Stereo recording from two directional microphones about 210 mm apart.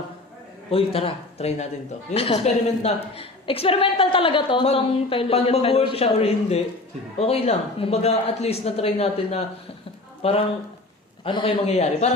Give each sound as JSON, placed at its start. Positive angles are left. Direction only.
{"t": 0.7, "sound": "a woman's voice", "side_deg": 25}